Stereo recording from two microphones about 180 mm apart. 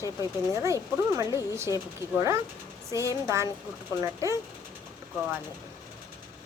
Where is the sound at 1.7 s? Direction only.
20° left (ahead or behind).